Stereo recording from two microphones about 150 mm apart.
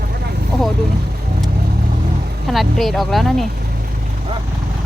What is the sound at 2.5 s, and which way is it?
Speech, centre (ahead or behind).